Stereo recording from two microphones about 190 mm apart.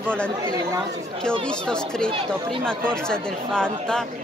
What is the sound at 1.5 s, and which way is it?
Speech, 5° left (ahead or behind).